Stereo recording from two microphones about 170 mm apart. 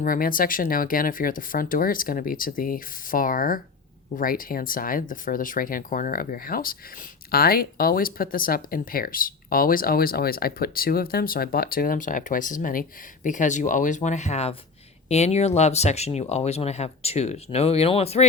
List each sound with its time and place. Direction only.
0.0 s speech: 55° left (ahead or behind); by 18.3 s 35° left (ahead or behind)